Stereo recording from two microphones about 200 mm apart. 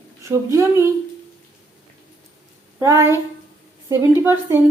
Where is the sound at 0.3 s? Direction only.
15° right (ahead or behind).